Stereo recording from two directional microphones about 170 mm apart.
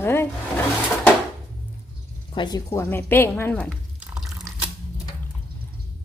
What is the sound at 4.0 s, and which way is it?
Liquid, 5° right (ahead or behind).